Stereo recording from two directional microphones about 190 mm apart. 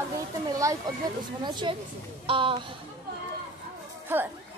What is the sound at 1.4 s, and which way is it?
Speech, 25° right (ahead or behind).